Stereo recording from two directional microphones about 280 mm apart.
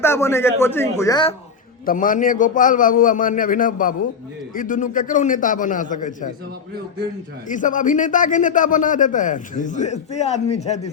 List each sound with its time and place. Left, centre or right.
0.0 s a man's voice: centre
1.8 s a man's voice: left
7.4 s a man's voice: left